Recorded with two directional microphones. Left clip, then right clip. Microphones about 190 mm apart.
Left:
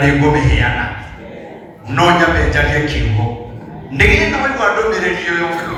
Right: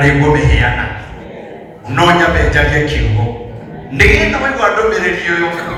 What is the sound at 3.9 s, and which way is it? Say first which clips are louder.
Speech: right 2 dB; 25° right (ahead or behind).